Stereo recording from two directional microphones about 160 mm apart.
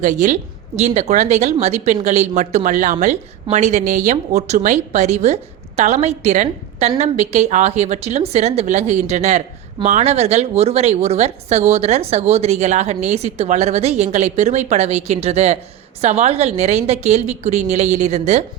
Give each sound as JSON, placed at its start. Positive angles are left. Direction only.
{"t": 0.0, "sound": "speech", "side_deg": -50}